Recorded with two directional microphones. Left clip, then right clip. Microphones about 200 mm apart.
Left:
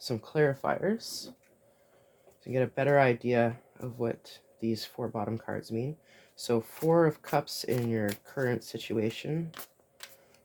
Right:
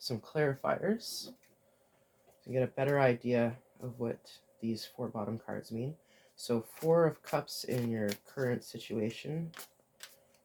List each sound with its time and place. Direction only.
0.0 s speech: 40° left (ahead or behind)
2.5 s speech: 50° left (ahead or behind)